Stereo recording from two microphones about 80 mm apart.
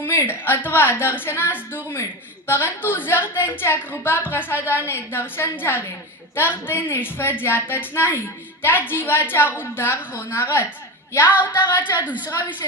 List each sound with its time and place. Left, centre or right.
0.0 s a woman's voice: left
11.9 s a woman's voice: right